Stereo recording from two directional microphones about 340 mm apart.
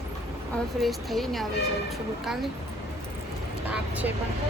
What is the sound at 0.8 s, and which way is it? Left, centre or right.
Speech, centre.